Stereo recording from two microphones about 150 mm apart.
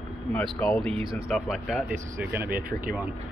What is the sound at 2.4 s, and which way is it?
Speech, 75° right (ahead or behind).